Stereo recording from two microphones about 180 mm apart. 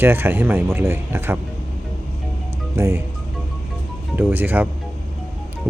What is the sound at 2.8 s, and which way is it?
Speech, 15° right (ahead or behind).